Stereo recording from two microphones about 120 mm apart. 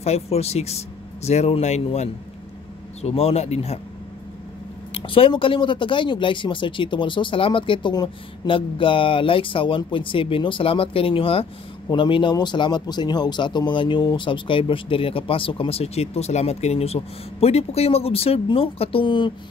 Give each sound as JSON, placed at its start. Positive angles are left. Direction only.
{"t": 0.0, "sound": "speech", "side_deg": 65}
{"t": 4.9, "sound": "speech", "side_deg": 50}